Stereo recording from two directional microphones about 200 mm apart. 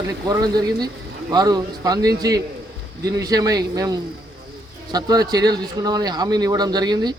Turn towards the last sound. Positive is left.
turn(degrees=-20)  # may be behind; listen again after turning